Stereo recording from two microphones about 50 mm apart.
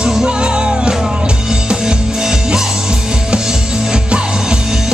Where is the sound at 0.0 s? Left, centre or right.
Centre.